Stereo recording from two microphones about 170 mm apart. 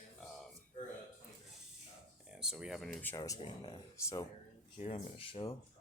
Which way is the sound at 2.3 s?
5° right (ahead or behind).